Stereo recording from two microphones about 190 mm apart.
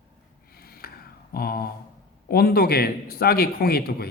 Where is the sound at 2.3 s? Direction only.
55° left (ahead or behind).